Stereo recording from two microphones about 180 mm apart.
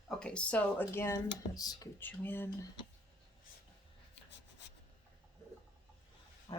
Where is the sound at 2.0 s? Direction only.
10° left (ahead or behind).